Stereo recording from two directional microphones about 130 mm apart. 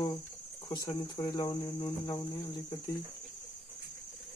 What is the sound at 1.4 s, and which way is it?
Cricket, 45° left (ahead or behind).